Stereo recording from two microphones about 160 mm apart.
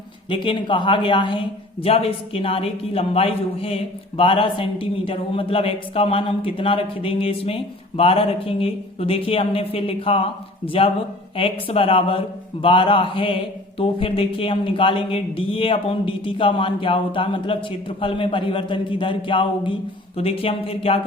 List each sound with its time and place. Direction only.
0.3 s speech: 30° left (ahead or behind)